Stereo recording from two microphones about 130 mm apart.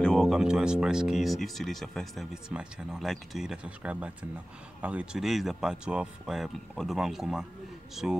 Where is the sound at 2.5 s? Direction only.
5° right (ahead or behind).